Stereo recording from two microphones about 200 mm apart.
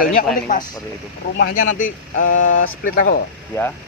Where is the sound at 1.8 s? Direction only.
40° left (ahead or behind).